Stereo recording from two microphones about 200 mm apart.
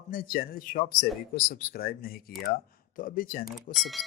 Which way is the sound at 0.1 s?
45° left (ahead or behind).